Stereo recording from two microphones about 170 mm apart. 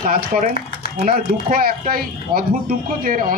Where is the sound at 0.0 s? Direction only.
50° right (ahead or behind).